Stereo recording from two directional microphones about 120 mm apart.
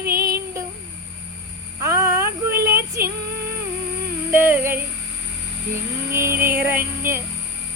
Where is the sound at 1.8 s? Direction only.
25° right (ahead or behind).